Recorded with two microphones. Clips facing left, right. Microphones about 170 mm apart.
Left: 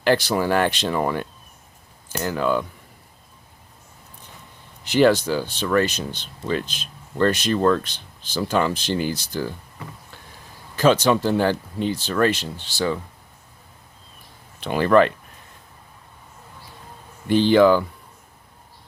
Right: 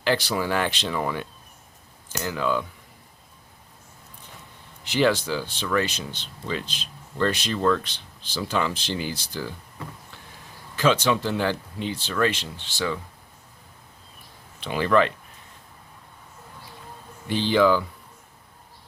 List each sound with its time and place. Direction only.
0.0 s speech: 50° left (ahead or behind)
4.9 s speech: 45° left (ahead or behind)
10.8 s speech: 40° left (ahead or behind)
14.6 s speech: 50° left (ahead or behind)
17.2 s speech: 55° left (ahead or behind)